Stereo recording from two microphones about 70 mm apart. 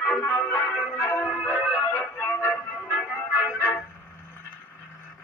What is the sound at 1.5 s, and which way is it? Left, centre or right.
Music, right.